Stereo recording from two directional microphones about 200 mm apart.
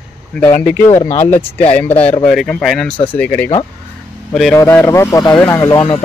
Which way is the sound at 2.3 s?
5° left (ahead or behind).